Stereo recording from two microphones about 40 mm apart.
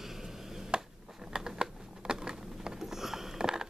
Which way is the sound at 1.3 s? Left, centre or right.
Centre.